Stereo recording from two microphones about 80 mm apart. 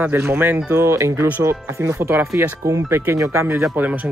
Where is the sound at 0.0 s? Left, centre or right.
Right.